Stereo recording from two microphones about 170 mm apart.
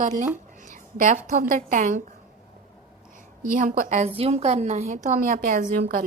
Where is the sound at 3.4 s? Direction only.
50° right (ahead or behind).